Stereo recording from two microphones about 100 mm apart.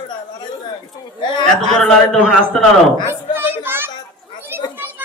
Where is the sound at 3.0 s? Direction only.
20° right (ahead or behind).